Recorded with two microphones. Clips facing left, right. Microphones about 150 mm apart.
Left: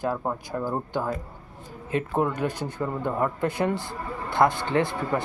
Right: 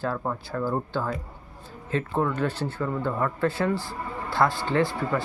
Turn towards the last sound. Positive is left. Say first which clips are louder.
# even
turn(degrees=20)  # may be behind; listen again after turning